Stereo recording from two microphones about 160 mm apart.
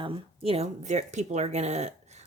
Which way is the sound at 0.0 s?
40° right (ahead or behind).